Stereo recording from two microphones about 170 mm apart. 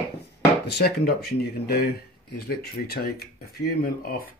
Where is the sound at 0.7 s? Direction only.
70° left (ahead or behind).